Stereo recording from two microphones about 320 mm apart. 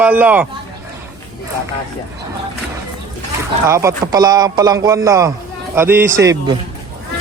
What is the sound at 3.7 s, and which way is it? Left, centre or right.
Speech, centre.